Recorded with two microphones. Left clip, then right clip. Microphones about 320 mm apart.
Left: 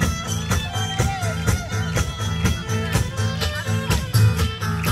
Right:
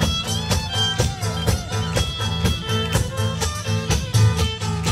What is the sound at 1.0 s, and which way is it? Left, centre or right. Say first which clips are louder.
Music: even; right.